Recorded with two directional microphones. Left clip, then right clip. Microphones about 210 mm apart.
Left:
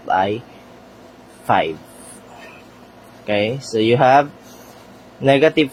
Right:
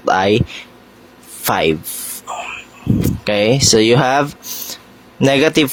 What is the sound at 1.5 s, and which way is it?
Speech, 55° right (ahead or behind).